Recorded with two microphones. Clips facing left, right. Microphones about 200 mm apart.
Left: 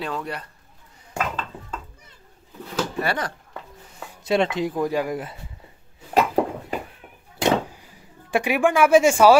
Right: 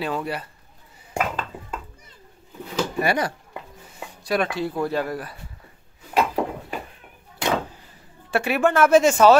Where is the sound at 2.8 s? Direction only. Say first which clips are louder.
Right 3 dB; 10° right (ahead or behind).